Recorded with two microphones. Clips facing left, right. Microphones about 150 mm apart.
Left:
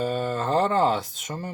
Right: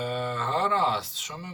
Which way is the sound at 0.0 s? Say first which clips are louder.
Left 4 dB; 40° left (ahead or behind).